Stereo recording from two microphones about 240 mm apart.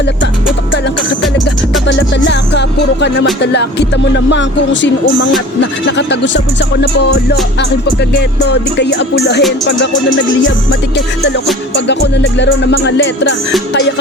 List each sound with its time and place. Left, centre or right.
1.9 s music: left
3.4 s speech: left
11.7 s speech: left